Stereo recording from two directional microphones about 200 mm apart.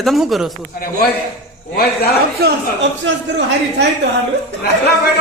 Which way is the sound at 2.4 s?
50° right (ahead or behind).